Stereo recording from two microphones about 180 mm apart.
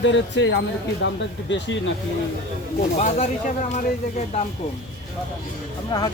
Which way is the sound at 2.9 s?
40° left (ahead or behind).